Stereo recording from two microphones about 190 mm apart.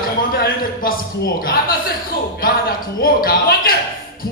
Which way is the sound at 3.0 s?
50° left (ahead or behind).